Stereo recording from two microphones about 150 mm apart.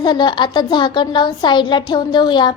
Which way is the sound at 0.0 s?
30° left (ahead or behind).